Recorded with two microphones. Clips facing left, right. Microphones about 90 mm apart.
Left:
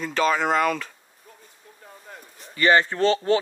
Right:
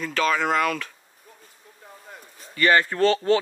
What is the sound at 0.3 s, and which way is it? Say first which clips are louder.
Speech: left 1 dB; 5° left (ahead or behind).